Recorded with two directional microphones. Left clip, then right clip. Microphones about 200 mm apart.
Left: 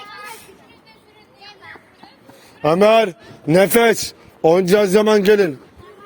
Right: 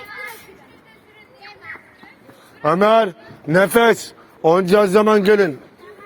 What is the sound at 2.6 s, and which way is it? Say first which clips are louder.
A man's voice: left 1 dB; 75° left (ahead or behind).